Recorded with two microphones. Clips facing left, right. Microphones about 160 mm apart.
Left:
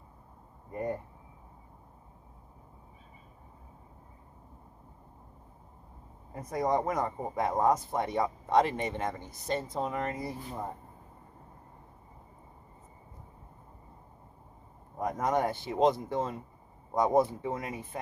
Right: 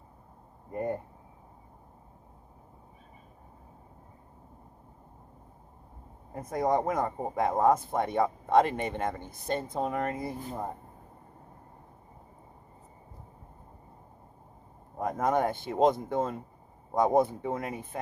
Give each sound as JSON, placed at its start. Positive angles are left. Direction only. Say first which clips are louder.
{"t": 0.7, "sound": "speech", "louder": "right 2 dB", "side_deg": -50}
{"t": 6.3, "sound": "speech", "louder": "right 2 dB", "side_deg": -50}
{"t": 14.9, "sound": "speech", "louder": "right 2 dB", "side_deg": -50}